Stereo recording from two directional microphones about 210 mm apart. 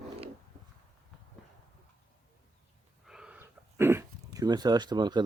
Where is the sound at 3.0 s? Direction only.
5° right (ahead or behind).